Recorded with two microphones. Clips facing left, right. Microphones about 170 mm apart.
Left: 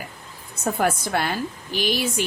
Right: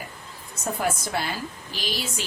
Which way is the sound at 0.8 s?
60° left (ahead or behind).